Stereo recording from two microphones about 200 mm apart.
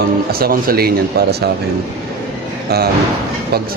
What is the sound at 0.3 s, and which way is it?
Speech, 50° right (ahead or behind).